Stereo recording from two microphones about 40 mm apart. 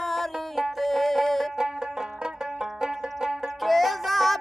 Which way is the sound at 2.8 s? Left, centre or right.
Centre.